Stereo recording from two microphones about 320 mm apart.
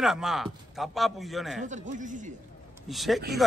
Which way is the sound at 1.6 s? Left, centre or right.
Right.